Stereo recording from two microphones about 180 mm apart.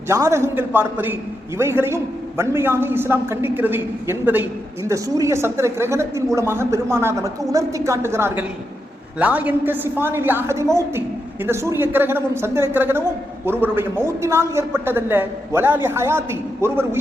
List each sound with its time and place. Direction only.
0.1 s a woman's voice: 15° right (ahead or behind)